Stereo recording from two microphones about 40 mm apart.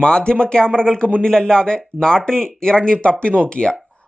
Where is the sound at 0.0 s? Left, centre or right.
Left.